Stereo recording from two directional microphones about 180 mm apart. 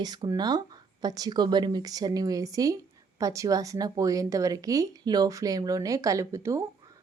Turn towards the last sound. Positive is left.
turn(degrees=-15)  # may be behind; listen again after turning